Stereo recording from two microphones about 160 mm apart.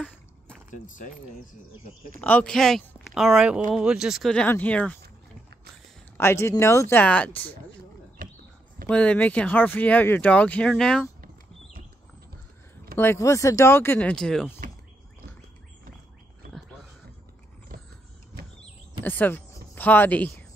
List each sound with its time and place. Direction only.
0.7 s speech: 55° left (ahead or behind)
2.1 s speech: 10° left (ahead or behind)
6.1 s speech: 15° left (ahead or behind)
8.8 s speech: 5° left (ahead or behind)
12.9 s speech: 15° left (ahead or behind)
19.0 s speech: 10° left (ahead or behind)